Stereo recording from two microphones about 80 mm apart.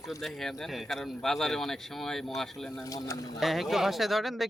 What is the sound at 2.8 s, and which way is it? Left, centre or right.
Speech, left.